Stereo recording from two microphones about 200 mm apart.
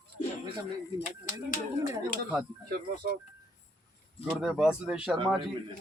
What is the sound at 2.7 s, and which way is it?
Speech, 50° right (ahead or behind).